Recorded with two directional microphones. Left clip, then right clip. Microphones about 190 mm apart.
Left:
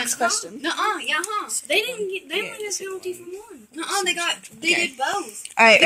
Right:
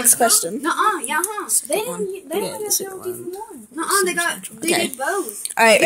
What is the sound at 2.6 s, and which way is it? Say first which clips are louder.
Speech: right 4 dB; 30° right (ahead or behind).